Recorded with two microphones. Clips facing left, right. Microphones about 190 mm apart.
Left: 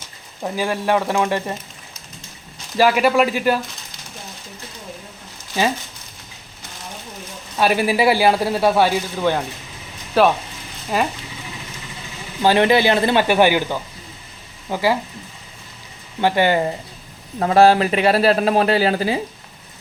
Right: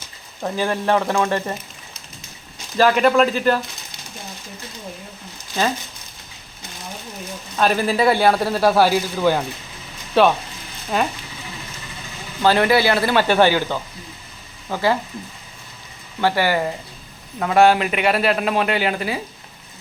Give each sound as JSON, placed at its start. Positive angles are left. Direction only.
{"t": 0.4, "sound": "speech", "side_deg": 10}
{"t": 2.7, "sound": "speech", "side_deg": 10}
{"t": 7.5, "sound": "a man's voice", "side_deg": 10}
{"t": 12.4, "sound": "speech", "side_deg": 15}
{"t": 16.2, "sound": "speech", "side_deg": 20}